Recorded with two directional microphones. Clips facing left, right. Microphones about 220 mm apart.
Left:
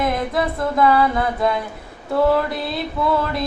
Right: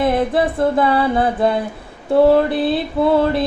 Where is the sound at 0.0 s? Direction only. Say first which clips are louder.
Right 5 dB; 30° right (ahead or behind).